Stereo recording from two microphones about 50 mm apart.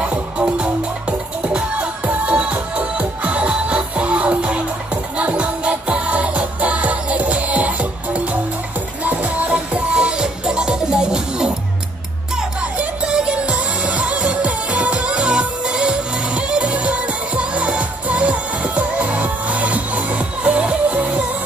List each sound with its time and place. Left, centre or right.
0.0 s music: right
9.5 s music: right
12.7 s music: right